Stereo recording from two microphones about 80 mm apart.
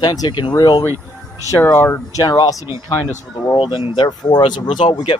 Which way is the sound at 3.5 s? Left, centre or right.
Left.